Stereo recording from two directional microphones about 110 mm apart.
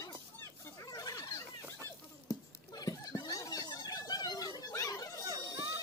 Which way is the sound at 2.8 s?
35° left (ahead or behind).